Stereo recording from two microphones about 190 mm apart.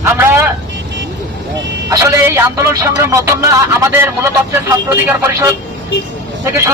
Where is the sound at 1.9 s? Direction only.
15° right (ahead or behind).